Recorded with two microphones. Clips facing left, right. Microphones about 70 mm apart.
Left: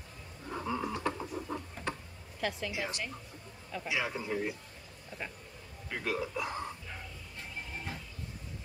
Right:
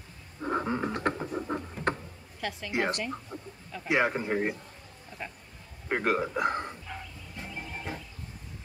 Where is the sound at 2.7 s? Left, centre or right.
Right.